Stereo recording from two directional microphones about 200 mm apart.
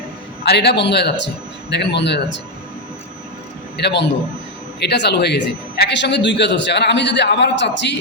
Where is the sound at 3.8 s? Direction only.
55° left (ahead or behind).